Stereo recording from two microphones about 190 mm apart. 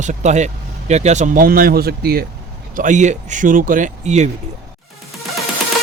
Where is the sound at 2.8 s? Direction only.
40° right (ahead or behind).